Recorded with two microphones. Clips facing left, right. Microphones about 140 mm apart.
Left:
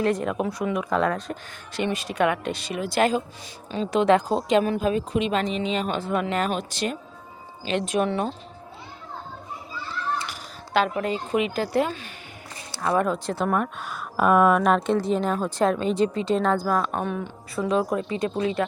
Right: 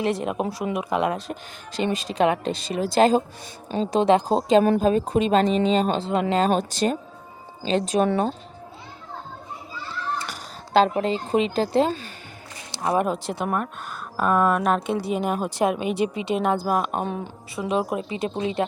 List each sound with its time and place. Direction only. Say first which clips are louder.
0.0 s speech: left 1 dB; 20° right (ahead or behind)
3.7 s a woman's voice: right 3 dB; 50° right (ahead or behind)
4.1 s speech: right 3 dB; 30° right (ahead or behind)
10.8 s speech: right 4 dB; 30° right (ahead or behind)
12.7 s speech: even; 20° right (ahead or behind)
13.5 s speech: left 2 dB; centre (ahead or behind); by 18.6 s 20° right (ahead or behind)